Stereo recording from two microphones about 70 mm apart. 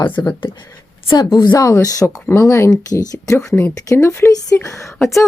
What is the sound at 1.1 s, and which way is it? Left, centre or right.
Speech, left.